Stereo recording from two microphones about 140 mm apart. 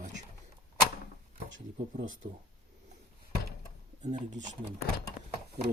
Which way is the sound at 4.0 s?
60° right (ahead or behind).